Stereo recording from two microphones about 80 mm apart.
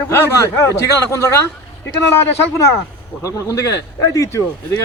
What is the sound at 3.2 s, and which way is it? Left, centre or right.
A man's voice, left.